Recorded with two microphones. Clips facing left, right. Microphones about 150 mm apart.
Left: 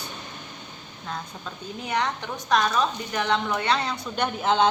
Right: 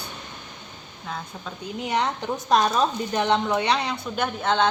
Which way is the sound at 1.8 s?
25° right (ahead or behind).